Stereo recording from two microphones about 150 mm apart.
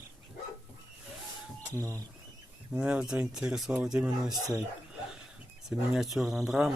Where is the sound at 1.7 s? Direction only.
20° right (ahead or behind).